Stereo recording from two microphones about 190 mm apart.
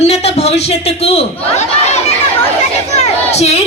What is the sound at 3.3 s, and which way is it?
Speech, 35° left (ahead or behind).